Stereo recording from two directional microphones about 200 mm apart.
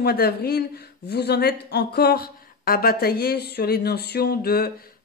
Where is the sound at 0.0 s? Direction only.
50° left (ahead or behind).